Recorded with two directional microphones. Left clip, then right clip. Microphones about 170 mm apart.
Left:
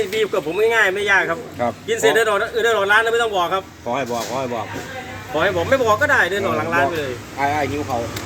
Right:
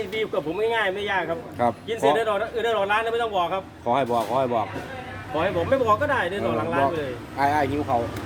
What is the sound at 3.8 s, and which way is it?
Speech, 25° right (ahead or behind).